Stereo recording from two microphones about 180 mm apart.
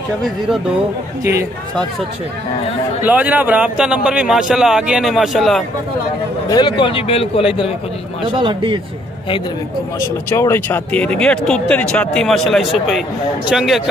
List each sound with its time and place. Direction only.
3.0 s a man's voice: 10° right (ahead or behind)
6.5 s speech: 25° left (ahead or behind)
8.4 s speech: 25° right (ahead or behind)
9.9 s a man's voice: 15° left (ahead or behind); by 13.8 s centre (ahead or behind)